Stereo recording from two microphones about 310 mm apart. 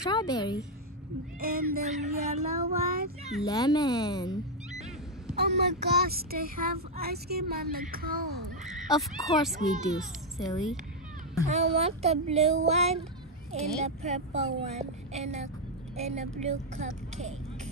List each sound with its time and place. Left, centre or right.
0.0 s speech: centre
1.4 s speech: right
3.4 s speech: centre
5.3 s speech: right
9.1 s a child's voice: centre
11.4 s speech: right